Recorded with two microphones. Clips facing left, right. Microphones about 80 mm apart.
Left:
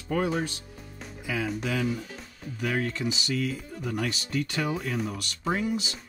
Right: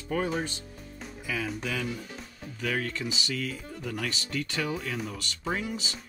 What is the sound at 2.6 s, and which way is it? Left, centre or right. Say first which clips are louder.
Speech: left 3 dB; centre.